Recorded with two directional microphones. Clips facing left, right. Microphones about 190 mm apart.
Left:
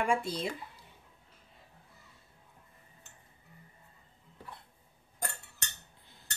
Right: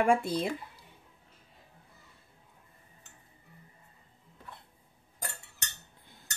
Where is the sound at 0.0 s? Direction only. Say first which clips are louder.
Right 5 dB; 55° right (ahead or behind).